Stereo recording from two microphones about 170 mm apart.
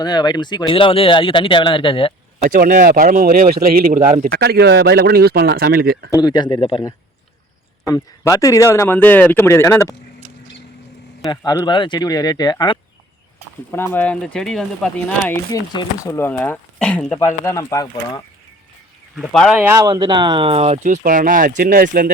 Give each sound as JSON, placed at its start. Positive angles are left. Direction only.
{"t": 0.0, "sound": "speech", "side_deg": 25}
{"t": 2.4, "sound": "speech", "side_deg": -60}
{"t": 6.1, "sound": "speech", "side_deg": 25}
{"t": 7.9, "sound": "speech", "side_deg": 20}
{"t": 11.3, "sound": "speech", "side_deg": 25}
{"t": 13.7, "sound": "speech", "side_deg": 10}
{"t": 15.3, "sound": "speech", "side_deg": 20}
{"t": 17.2, "sound": "speech", "side_deg": 15}
{"t": 19.1, "sound": "speech", "side_deg": 0}
{"t": 19.5, "sound": "speech", "side_deg": -15}